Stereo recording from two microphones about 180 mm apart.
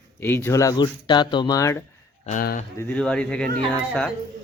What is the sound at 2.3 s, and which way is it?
Speech, 50° left (ahead or behind).